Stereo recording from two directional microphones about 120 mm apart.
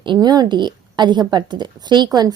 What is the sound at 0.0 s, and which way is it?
A woman's voice, 40° right (ahead or behind).